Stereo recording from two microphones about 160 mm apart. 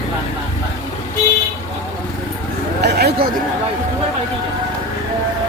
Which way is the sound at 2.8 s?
90° right.